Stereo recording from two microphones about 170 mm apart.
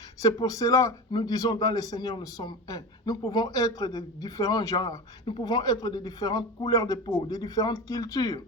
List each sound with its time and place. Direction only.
0.2 s a man's voice: 20° left (ahead or behind)